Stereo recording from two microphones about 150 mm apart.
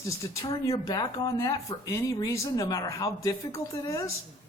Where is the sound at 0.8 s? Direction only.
25° left (ahead or behind).